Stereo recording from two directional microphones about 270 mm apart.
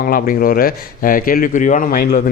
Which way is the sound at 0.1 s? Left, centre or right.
Left.